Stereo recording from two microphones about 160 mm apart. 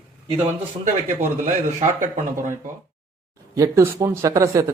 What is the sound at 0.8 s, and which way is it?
Speech, 50° right (ahead or behind).